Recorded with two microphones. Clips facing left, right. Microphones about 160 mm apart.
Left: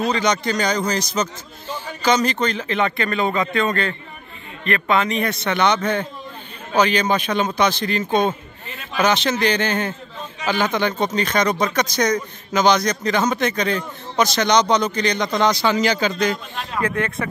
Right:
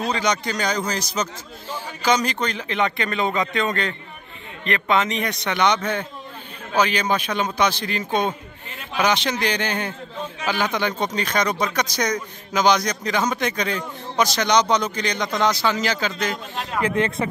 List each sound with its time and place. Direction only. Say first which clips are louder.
0.1 s a man's voice: left 3 dB; 10° right (ahead or behind)
16.8 s a man's voice: right 2 dB; 25° right (ahead or behind)